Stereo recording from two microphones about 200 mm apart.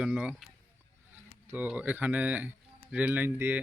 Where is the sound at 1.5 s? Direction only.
10° right (ahead or behind).